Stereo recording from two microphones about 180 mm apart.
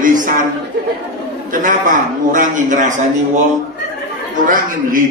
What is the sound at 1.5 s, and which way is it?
A man's voice, 45° right (ahead or behind).